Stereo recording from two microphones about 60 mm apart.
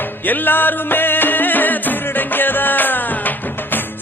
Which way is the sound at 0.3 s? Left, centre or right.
Left.